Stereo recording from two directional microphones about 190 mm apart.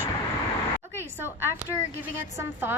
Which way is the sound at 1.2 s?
10° right (ahead or behind).